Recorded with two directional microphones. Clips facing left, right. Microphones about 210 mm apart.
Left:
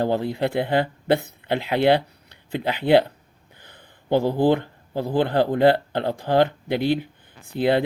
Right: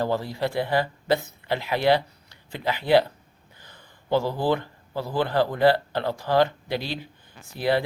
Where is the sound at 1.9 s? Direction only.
60° left (ahead or behind).